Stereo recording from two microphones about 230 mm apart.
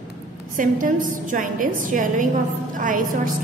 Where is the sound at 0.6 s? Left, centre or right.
Right.